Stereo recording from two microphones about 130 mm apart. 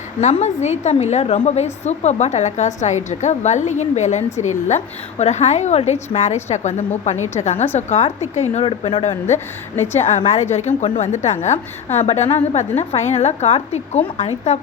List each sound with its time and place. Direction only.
0.2 s a woman's voice: 60° left (ahead or behind)
10.2 s a woman's voice: 60° left (ahead or behind)